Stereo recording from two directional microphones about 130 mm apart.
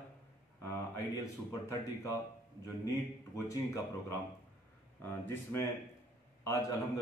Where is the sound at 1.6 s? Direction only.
20° left (ahead or behind).